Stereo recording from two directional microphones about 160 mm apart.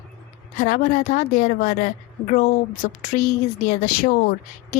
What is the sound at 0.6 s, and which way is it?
A woman's voice, 55° left (ahead or behind).